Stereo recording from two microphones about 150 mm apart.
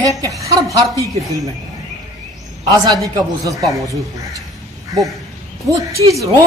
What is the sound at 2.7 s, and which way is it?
Speech, 25° right (ahead or behind).